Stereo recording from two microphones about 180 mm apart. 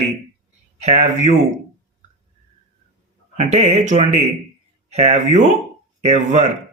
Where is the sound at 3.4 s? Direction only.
40° right (ahead or behind).